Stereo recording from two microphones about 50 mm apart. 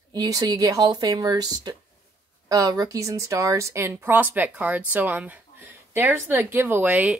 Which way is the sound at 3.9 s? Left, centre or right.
Right.